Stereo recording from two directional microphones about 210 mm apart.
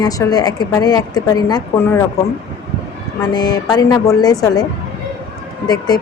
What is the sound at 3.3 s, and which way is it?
A woman's voice, 20° left (ahead or behind).